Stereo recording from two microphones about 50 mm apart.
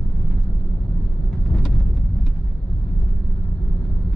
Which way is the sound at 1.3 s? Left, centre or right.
Centre.